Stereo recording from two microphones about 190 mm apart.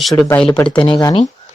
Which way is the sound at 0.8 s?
25° left (ahead or behind).